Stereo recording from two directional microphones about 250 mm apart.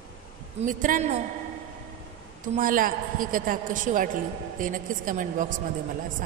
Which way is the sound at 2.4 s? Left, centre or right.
Right.